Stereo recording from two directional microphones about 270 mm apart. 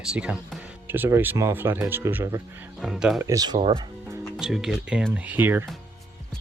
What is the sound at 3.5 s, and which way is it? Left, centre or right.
Music, centre.